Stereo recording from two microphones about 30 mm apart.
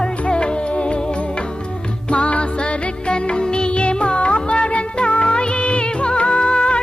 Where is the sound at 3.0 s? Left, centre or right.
Left.